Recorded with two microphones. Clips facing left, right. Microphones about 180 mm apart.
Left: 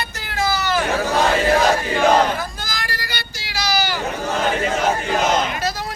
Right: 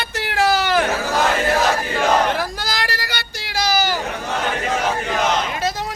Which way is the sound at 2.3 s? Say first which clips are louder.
Right 4 dB; 75° right (ahead or behind).